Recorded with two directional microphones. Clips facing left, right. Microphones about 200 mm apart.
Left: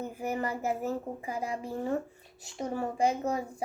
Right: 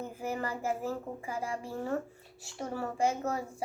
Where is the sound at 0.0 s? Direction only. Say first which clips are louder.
Left 3 dB; 15° left (ahead or behind).